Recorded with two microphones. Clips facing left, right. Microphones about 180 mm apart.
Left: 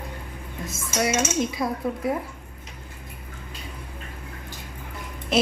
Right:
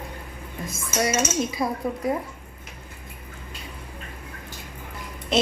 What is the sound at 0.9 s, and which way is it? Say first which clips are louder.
Cutlery: even; centre (ahead or behind).